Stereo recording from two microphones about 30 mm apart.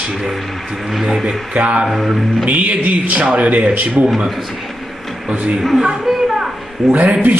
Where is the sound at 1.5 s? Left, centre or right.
Right.